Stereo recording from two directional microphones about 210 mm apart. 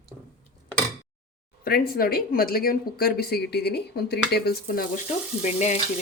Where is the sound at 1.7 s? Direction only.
45° left (ahead or behind).